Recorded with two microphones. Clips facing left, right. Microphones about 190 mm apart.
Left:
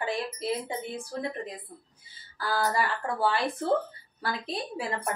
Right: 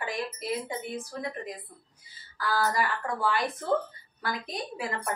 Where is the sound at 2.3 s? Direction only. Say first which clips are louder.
Even; 30° left (ahead or behind).